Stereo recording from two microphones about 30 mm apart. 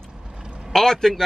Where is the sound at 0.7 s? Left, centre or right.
Centre.